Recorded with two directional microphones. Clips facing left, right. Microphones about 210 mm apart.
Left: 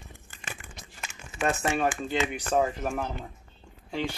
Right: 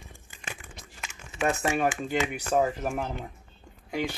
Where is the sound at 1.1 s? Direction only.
20° right (ahead or behind).